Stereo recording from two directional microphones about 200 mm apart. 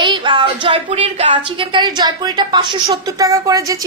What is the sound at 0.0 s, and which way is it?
A woman's voice, 25° right (ahead or behind).